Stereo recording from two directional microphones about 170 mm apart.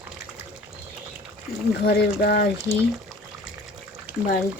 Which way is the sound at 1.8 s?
70° left (ahead or behind).